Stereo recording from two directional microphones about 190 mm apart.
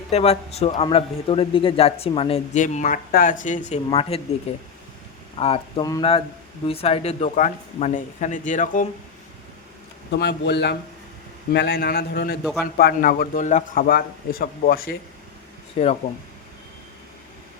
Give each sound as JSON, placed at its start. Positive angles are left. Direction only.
{"t": 0.1, "sound": "a man's voice", "side_deg": 35}
{"t": 10.1, "sound": "a man's voice", "side_deg": 60}
{"t": 12.4, "sound": "a man's voice", "side_deg": 0}
{"t": 12.7, "sound": "a man's voice", "side_deg": 50}
{"t": 15.8, "sound": "a man's voice", "side_deg": 30}